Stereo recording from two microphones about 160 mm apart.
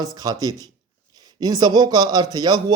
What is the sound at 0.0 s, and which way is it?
Speech, 25° right (ahead or behind).